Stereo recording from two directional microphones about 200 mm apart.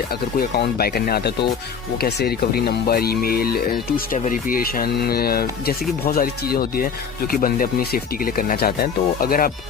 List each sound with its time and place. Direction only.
0.3 s speech: 50° left (ahead or behind)